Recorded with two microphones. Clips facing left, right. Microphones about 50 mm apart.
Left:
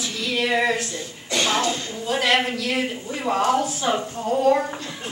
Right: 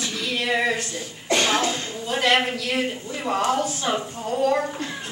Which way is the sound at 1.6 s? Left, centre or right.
Right.